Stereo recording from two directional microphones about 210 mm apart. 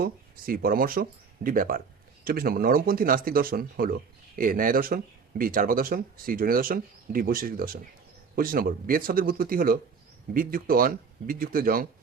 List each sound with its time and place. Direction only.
0.0 s speech: 45° right (ahead or behind)